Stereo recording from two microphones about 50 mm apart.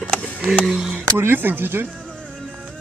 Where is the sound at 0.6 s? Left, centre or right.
Centre.